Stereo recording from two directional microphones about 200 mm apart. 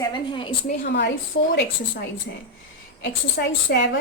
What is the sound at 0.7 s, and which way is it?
Speech, 55° left (ahead or behind).